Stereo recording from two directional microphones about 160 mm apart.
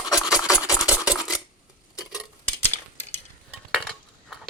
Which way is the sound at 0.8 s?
5° right (ahead or behind).